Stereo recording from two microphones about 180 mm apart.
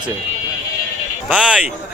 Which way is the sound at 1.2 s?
5° right (ahead or behind).